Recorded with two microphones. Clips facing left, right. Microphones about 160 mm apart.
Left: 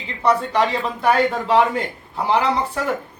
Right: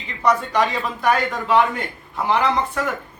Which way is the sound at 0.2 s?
30° left (ahead or behind).